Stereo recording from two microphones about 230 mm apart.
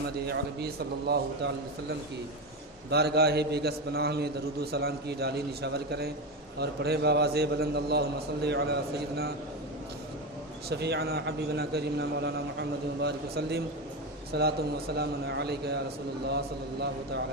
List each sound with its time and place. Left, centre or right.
0.3 s a man's voice: right
2.9 s a man's voice: right
10.7 s a man's voice: right